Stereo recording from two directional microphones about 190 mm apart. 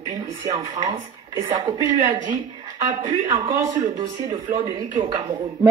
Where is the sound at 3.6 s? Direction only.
15° right (ahead or behind).